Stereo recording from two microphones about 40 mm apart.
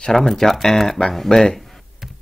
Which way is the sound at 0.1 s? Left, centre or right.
Centre.